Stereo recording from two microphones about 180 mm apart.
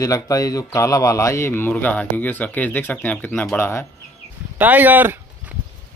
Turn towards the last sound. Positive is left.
turn(degrees=-10)  # may be behind; listen again after turning